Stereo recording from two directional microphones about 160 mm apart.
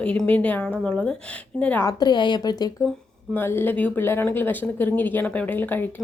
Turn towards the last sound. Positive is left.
turn(degrees=10)  # may be behind; listen again after turning